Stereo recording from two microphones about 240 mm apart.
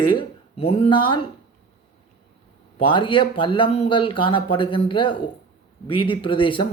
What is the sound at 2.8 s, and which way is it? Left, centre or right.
Speech, left.